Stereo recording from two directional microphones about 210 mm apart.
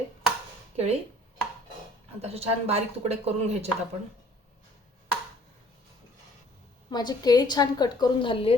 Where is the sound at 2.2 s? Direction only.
30° right (ahead or behind).